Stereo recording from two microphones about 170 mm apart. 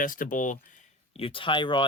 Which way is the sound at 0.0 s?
50° left (ahead or behind).